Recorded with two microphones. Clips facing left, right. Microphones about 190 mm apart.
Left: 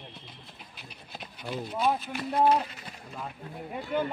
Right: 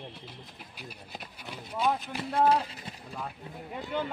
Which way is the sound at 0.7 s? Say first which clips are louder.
Right 3 dB; 10° right (ahead or behind).